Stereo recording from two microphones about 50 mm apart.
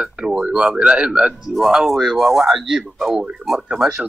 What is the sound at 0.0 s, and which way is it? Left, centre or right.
Speech, centre.